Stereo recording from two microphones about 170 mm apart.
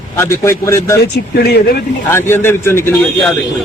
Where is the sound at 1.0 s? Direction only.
75° left (ahead or behind).